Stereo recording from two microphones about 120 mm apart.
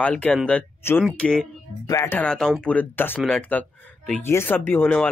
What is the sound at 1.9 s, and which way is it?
Speech, 20° left (ahead or behind).